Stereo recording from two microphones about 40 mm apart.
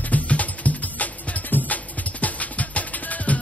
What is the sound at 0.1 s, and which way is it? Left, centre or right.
Music, left.